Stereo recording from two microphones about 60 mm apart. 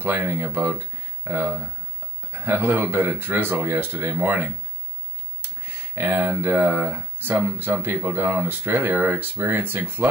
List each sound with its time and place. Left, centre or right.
0.0 s speech: right
5.6 s a sound: right
6.7 s speech: right